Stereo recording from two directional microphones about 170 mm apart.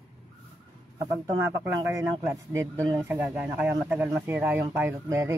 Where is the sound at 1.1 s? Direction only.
20° right (ahead or behind).